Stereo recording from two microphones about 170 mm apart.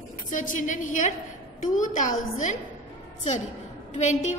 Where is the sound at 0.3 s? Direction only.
50° left (ahead or behind).